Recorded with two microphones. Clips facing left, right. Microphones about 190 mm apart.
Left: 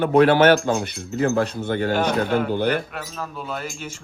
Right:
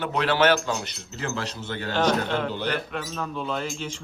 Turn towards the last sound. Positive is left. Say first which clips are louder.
# right 1 dB
turn(degrees=10)  # may be behind; listen again after turning